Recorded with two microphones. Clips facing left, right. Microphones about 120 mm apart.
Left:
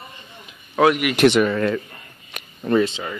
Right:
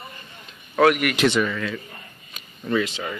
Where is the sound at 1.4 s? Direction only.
45° left (ahead or behind).